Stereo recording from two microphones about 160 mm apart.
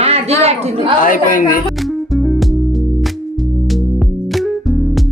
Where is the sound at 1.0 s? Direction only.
60° left (ahead or behind).